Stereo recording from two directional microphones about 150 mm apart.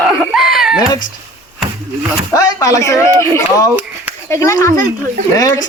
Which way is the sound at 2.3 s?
25° left (ahead or behind).